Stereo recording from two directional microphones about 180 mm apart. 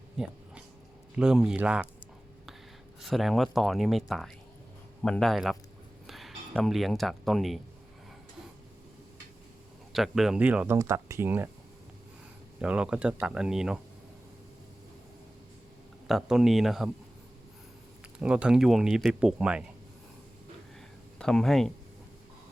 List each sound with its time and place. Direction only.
0.2 s speech: 5° right (ahead or behind)
3.0 s speech: centre (ahead or behind)
9.9 s speech: centre (ahead or behind)
12.6 s speech: 5° right (ahead or behind)
16.0 s speech: centre (ahead or behind)
18.2 s speech: 5° right (ahead or behind)
21.2 s speech: 5° left (ahead or behind)